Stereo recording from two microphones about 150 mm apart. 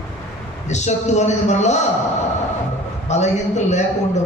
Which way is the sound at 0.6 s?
50° left (ahead or behind).